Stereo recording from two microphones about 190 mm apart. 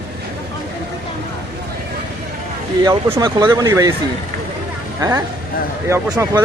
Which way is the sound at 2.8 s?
15° right (ahead or behind).